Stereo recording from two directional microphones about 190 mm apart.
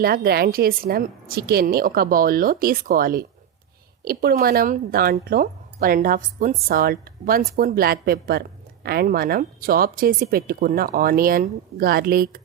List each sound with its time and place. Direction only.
0.0 s a woman's voice: 50° right (ahead or behind)